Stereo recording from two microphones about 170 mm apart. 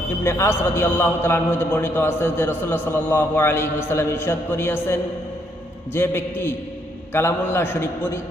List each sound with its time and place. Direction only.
0.3 s a man's voice: 15° left (ahead or behind)